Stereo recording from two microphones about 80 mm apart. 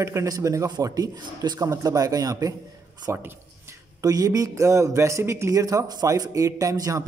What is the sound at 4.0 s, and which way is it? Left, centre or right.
Speech, right.